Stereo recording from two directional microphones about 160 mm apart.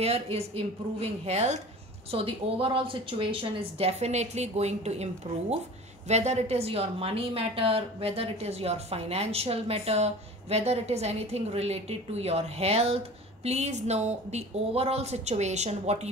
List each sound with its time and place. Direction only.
0.0 s a woman's voice: 40° right (ahead or behind)